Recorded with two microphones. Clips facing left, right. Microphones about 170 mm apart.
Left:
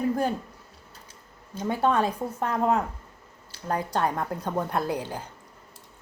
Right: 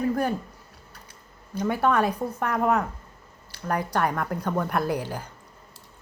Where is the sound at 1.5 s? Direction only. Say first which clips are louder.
Right 1 dB; 25° left (ahead or behind).